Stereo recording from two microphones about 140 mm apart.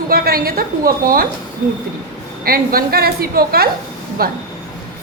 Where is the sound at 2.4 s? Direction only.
90° right.